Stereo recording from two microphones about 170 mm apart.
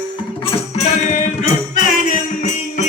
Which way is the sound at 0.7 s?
45° left (ahead or behind).